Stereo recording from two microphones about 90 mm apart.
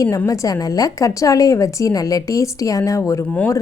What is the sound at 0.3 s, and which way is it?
Speech, 40° left (ahead or behind).